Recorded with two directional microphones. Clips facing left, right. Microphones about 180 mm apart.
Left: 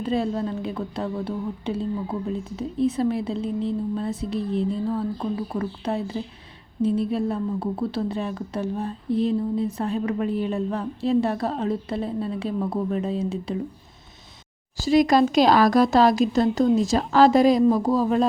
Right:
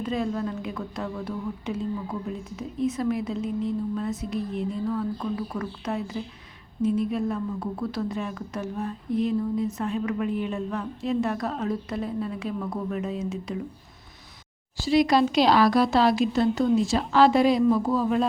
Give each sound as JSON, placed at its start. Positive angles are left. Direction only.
{"t": 0.0, "sound": "a woman's voice", "side_deg": 30}
{"t": 14.8, "sound": "a woman's voice", "side_deg": 45}